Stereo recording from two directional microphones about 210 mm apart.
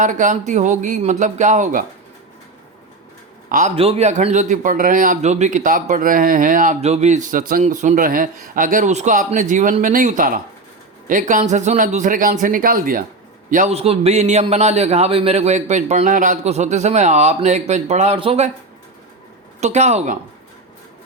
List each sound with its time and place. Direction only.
0.0 s a man's voice: 35° right (ahead or behind)
3.5 s a man's voice: 30° right (ahead or behind)
19.5 s a man's voice: 35° right (ahead or behind)